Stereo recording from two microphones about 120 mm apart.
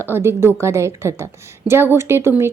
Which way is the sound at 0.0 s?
20° right (ahead or behind).